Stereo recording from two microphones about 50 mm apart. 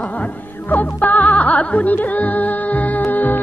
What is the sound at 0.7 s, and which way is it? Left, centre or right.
Music, left.